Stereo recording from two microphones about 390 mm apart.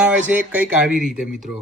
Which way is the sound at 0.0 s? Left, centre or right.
Centre.